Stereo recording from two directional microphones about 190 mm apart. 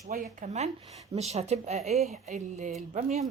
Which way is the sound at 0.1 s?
40° right (ahead or behind).